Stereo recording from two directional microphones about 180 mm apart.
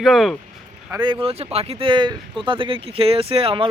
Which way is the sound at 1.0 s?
30° right (ahead or behind).